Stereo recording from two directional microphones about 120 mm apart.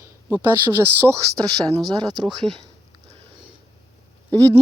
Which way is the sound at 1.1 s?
30° right (ahead or behind).